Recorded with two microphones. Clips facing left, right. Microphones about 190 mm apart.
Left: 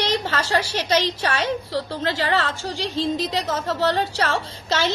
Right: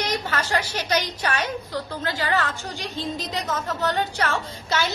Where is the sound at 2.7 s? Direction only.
90° left.